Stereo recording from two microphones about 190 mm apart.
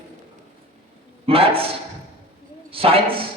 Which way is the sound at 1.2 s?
30° right (ahead or behind).